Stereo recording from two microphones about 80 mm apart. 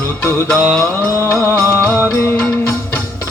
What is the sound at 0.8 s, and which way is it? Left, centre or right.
Mantra, left.